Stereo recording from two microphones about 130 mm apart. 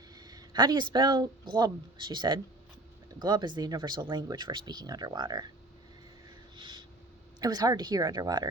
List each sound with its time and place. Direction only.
0.2 s speech: 30° right (ahead or behind)
6.6 s a sound: 35° right (ahead or behind)
7.4 s speech: 30° right (ahead or behind)